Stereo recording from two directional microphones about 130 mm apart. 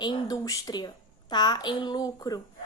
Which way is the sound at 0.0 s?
30° left (ahead or behind).